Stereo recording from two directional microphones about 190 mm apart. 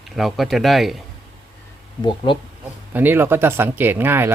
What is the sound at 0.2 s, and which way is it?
Speech, centre (ahead or behind).